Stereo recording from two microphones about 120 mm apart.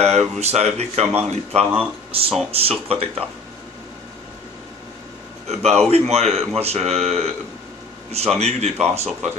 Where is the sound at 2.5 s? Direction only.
55° right (ahead or behind).